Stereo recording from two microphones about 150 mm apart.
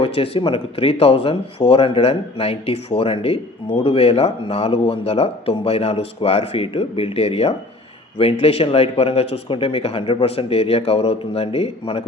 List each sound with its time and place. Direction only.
0.0 s a man's voice: 40° left (ahead or behind)